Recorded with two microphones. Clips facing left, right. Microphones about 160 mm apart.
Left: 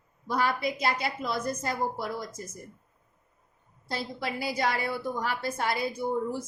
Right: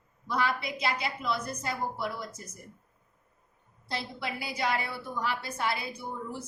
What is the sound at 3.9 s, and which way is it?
A woman's voice, 45° left (ahead or behind).